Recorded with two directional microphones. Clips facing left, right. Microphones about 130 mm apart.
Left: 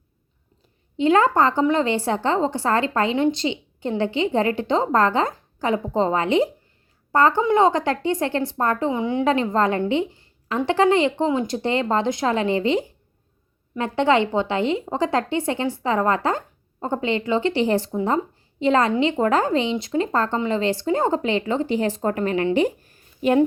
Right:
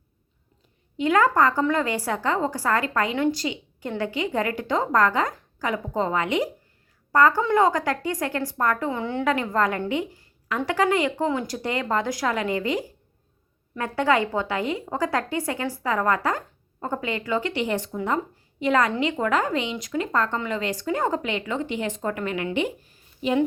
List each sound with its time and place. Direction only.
0.9 s a woman's voice: 25° left (ahead or behind)
9.2 s a woman's voice: 25° left (ahead or behind)
9.9 s a sound: 25° left (ahead or behind)
10.7 s a woman's voice: 25° left (ahead or behind); by 23.4 s 45° left (ahead or behind)